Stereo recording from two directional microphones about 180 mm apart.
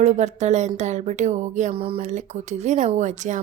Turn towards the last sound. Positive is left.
turn(degrees=-40)  # may be behind; listen again after turning